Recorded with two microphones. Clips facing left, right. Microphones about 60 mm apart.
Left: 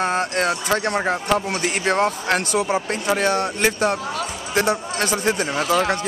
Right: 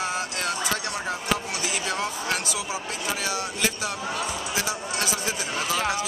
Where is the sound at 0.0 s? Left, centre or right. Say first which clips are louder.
Left 8 dB; left.